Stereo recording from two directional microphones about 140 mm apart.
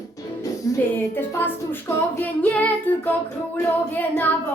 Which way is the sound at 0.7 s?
20° left (ahead or behind).